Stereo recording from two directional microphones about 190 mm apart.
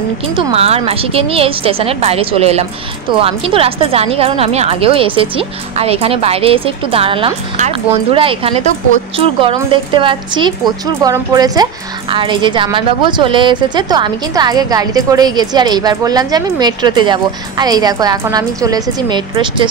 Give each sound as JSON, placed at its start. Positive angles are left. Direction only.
{"t": 0.4, "sound": "a woman's voice", "side_deg": -30}